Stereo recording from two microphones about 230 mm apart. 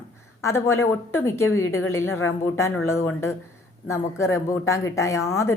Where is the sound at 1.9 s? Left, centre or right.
Centre.